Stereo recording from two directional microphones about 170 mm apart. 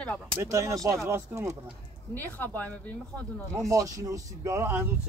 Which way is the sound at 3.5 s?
20° right (ahead or behind).